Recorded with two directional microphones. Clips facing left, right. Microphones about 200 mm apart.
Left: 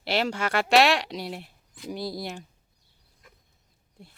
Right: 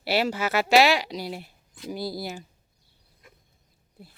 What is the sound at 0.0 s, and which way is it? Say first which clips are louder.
Speech: right 2 dB; 5° right (ahead or behind).